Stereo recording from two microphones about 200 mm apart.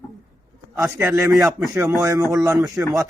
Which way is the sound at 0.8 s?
15° right (ahead or behind).